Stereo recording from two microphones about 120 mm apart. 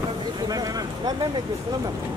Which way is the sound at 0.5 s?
30° right (ahead or behind).